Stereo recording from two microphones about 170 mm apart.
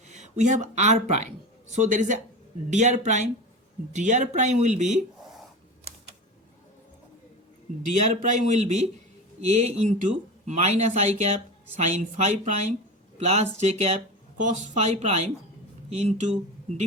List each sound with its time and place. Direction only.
0.1 s speech: 45° right (ahead or behind)
7.9 s speech: 40° right (ahead or behind)